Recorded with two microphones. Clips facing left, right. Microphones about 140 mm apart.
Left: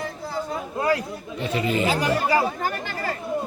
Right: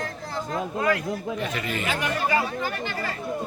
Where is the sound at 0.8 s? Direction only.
30° left (ahead or behind).